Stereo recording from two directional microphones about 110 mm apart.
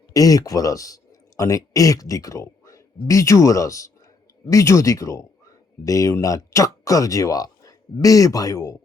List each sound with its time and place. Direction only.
0.1 s a man's voice: 35° left (ahead or behind)